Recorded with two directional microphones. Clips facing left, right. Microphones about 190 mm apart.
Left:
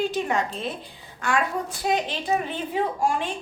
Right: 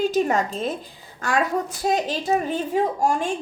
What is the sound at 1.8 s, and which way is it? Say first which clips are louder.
A woman's voice: right 1 dB; 40° right (ahead or behind).